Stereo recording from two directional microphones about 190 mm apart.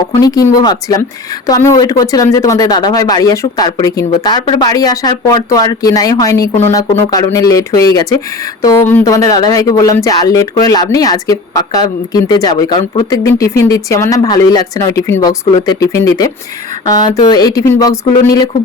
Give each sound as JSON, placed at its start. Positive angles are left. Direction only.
{"t": 0.1, "sound": "speech", "side_deg": 20}